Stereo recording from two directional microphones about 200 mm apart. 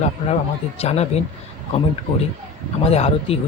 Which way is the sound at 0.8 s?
30° left (ahead or behind).